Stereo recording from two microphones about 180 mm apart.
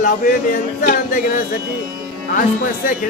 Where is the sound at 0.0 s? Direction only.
45° left (ahead or behind).